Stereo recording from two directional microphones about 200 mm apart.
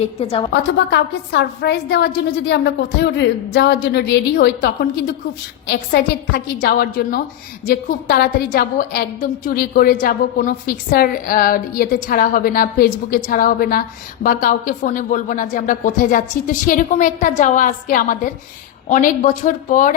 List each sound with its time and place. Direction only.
0.0 s a woman's voice: 30° left (ahead or behind)
0.5 s a woman's voice: 60° left (ahead or behind); by 19.9 s 40° left (ahead or behind)